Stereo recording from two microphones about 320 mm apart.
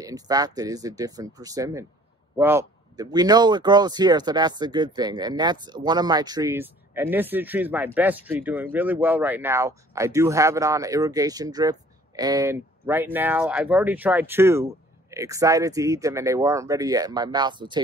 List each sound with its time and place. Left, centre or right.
0.0 s speech: centre